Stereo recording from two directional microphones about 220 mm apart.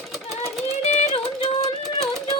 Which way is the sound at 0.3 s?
30° left (ahead or behind).